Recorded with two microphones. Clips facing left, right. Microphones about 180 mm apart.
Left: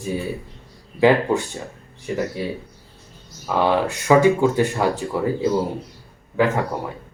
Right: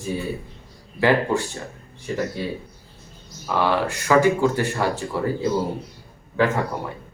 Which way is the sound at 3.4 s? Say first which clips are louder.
Left 2 dB; 20° left (ahead or behind).